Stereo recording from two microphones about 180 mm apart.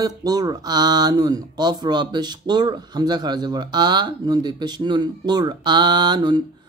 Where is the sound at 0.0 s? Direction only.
20° right (ahead or behind).